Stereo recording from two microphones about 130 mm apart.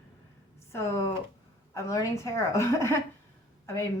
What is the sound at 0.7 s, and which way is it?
A woman's voice, 20° left (ahead or behind).